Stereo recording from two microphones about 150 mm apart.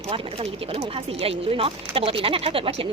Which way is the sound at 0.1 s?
40° right (ahead or behind).